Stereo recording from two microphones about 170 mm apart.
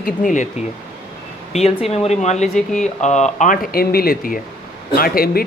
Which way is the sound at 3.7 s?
65° left (ahead or behind).